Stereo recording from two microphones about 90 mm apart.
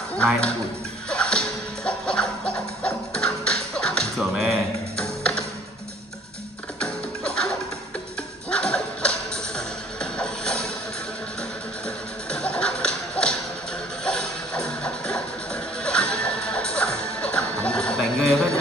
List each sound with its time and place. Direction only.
0.1 s speech: 10° left (ahead or behind)
1.1 s music: 10° left (ahead or behind)
6.8 s music: 10° left (ahead or behind)
12.3 s a sound: 10° left (ahead or behind)
14.0 s music: 10° left (ahead or behind)